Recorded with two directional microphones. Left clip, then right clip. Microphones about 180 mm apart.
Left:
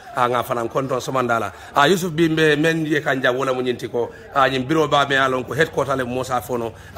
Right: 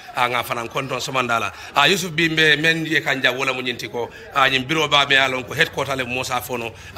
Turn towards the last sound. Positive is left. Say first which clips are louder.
# left 2 dB
turn(degrees=40)  # may be behind; listen again after turning